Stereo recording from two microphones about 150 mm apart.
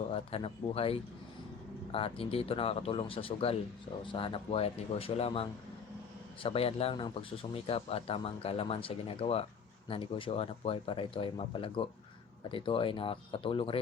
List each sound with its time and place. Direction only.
0.1 s speech: 40° left (ahead or behind)